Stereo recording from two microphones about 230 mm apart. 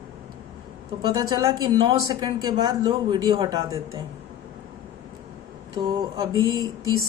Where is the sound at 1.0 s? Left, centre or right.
Centre.